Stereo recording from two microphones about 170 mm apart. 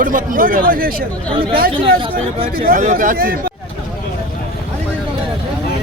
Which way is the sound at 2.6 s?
50° right (ahead or behind).